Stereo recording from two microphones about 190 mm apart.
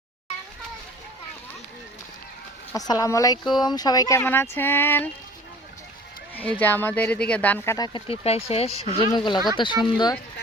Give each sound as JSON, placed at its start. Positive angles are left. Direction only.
{"t": 2.7, "sound": "speech", "side_deg": 20}
{"t": 6.3, "sound": "speech", "side_deg": 10}